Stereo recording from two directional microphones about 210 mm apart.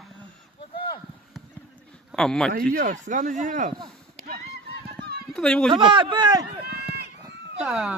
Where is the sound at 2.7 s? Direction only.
35° right (ahead or behind).